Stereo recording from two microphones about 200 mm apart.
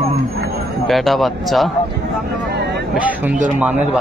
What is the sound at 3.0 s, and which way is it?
Speech, 10° right (ahead or behind).